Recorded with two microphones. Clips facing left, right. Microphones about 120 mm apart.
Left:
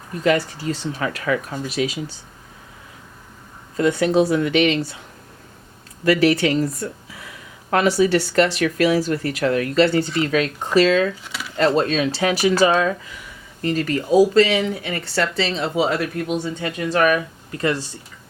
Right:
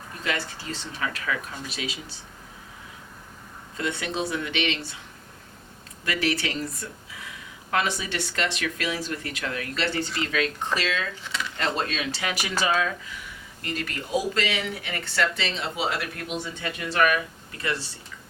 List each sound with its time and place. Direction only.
0.2 s speech: 40° left (ahead or behind)
3.8 s speech: 40° left (ahead or behind)
6.1 s speech: 40° left (ahead or behind)
11.3 s a sound: 5° left (ahead or behind)
11.5 s speech: 40° left (ahead or behind)